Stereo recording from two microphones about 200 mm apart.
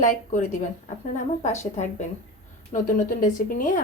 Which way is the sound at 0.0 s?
40° left (ahead or behind).